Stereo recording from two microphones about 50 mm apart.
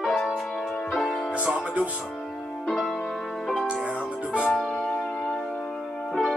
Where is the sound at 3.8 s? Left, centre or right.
Right.